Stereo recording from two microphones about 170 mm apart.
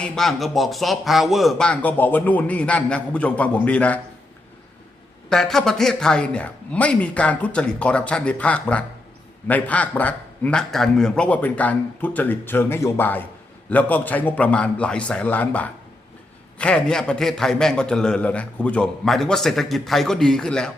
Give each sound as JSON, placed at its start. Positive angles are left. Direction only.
{"t": 0.0, "sound": "speech", "side_deg": 0}
{"t": 5.3, "sound": "a man's voice", "side_deg": 0}